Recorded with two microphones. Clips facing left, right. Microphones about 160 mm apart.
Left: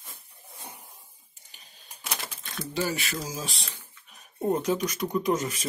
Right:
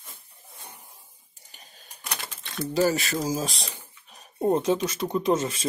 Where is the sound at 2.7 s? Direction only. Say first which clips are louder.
Right 7 dB; 40° right (ahead or behind).